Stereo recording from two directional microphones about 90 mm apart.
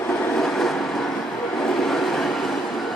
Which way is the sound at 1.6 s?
5° left (ahead or behind).